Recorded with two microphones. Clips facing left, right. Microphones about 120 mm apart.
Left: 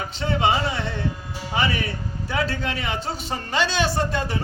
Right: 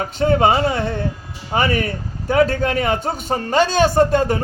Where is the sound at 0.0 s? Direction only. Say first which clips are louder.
Right 7 dB; 50° right (ahead or behind).